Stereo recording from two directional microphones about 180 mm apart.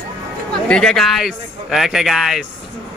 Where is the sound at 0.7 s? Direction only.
5° left (ahead or behind).